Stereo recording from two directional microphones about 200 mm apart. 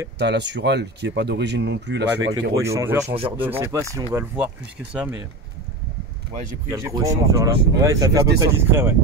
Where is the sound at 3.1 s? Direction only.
25° right (ahead or behind).